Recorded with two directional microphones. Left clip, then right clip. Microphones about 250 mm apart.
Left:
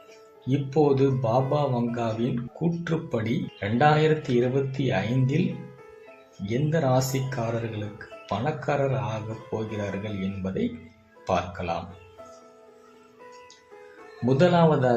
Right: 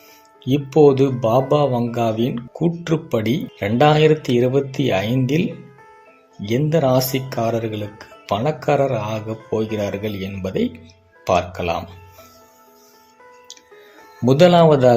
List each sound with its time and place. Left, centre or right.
0.4 s speech: right
6.4 s speech: right
14.3 s speech: right